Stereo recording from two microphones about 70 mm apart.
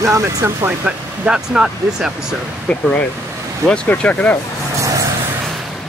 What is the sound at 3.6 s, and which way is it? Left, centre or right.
Speech, centre.